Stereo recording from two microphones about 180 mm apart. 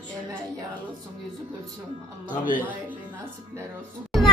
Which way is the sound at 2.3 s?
50° left (ahead or behind).